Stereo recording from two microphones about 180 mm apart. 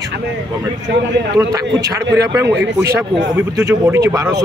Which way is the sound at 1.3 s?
20° right (ahead or behind).